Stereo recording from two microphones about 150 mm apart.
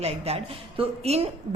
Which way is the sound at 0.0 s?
45° right (ahead or behind).